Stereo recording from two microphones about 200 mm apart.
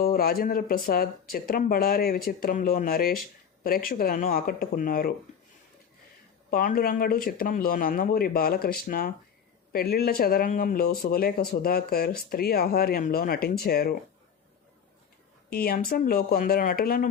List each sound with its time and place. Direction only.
0.0 s speech: 45° left (ahead or behind)
6.5 s speech: 50° left (ahead or behind)
15.5 s speech: 50° left (ahead or behind)